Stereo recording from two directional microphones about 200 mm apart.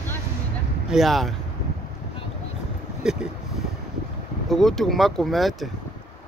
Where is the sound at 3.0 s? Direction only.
5° right (ahead or behind).